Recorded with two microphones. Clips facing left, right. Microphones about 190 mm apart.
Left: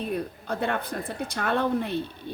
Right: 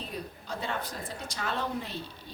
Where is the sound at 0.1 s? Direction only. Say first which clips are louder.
Left 8 dB; 60° left (ahead or behind).